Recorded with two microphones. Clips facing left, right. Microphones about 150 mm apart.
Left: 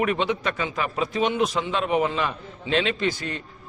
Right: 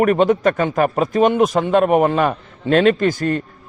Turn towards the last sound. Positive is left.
turn(degrees=-50)  # may be behind; listen again after turning